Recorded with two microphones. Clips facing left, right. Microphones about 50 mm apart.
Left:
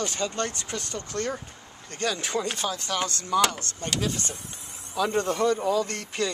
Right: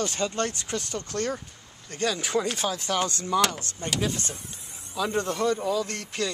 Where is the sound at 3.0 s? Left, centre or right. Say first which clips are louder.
Left 3 dB; right.